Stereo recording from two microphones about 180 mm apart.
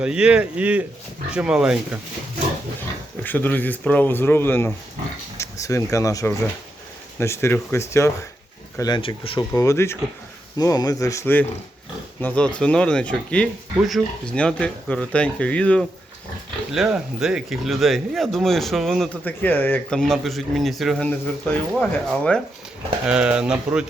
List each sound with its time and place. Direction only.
0.0 s speech: 5° right (ahead or behind)
3.2 s speech: 10° left (ahead or behind)
8.8 s speech: 25° left (ahead or behind)
9.4 s speech: 15° left (ahead or behind)
23.0 s speech: 5° right (ahead or behind)